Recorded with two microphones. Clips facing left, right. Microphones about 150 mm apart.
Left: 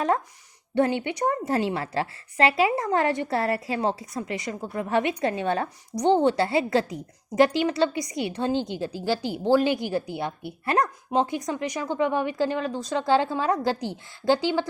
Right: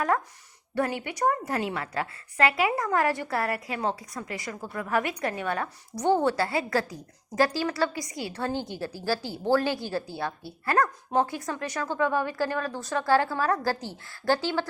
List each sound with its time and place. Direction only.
0.8 s a woman's voice: 25° left (ahead or behind)